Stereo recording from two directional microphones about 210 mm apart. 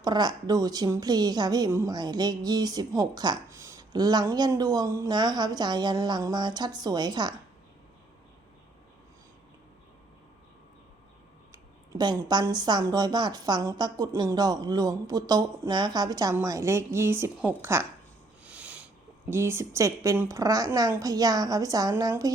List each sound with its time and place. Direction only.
0.0 s a woman's voice: 20° right (ahead or behind)
11.5 s speech: 20° right (ahead or behind)
18.4 s a sound: 5° right (ahead or behind)
19.2 s speech: 10° right (ahead or behind)